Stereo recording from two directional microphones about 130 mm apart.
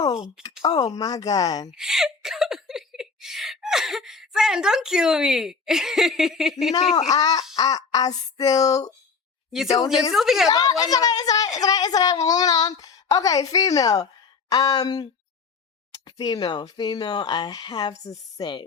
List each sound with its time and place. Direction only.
0.6 s a woman's voice: 30° left (ahead or behind)
1.7 s a sound: 5° right (ahead or behind)
7.1 s a woman's voice: 30° left (ahead or behind)
10.1 s a woman's voice: centre (ahead or behind)
10.5 s a woman's voice: 30° left (ahead or behind)
16.0 s speech: 30° left (ahead or behind)